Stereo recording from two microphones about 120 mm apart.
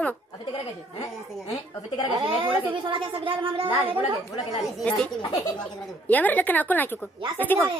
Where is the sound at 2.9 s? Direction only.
45° right (ahead or behind).